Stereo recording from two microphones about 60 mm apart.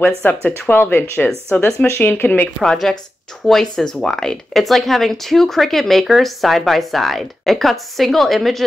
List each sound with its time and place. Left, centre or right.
0.0 s a woman's voice: left
2.6 s a woman's voice: centre